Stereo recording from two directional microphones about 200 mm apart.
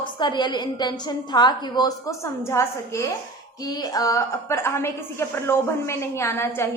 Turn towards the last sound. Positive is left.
turn(degrees=10)  # may be behind; listen again after turning